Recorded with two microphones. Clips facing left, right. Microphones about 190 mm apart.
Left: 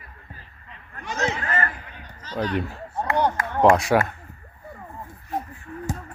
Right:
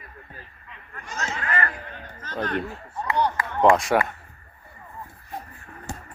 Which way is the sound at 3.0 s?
50° left (ahead or behind).